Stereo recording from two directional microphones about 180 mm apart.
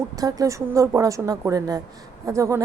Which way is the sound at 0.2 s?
20° right (ahead or behind).